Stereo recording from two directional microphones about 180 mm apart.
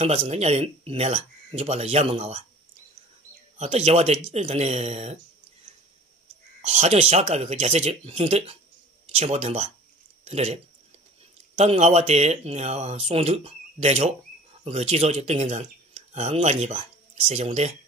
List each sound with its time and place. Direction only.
0.0 s speech: 35° right (ahead or behind)
3.5 s speech: 35° right (ahead or behind)
6.6 s speech: 40° right (ahead or behind)